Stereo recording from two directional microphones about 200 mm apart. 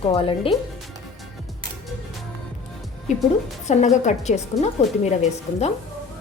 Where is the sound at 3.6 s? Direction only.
35° left (ahead or behind).